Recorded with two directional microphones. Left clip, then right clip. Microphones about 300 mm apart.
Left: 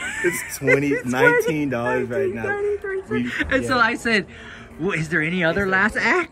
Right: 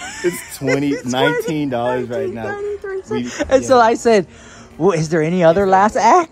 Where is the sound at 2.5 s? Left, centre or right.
Centre.